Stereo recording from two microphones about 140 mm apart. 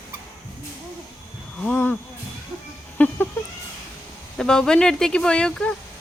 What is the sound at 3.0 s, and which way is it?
Chicken, 10° left (ahead or behind).